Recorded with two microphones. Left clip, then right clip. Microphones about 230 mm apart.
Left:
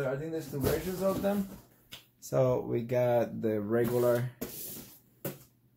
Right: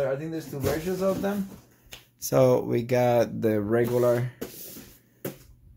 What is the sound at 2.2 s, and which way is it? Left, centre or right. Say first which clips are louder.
Speech: right 7 dB; right.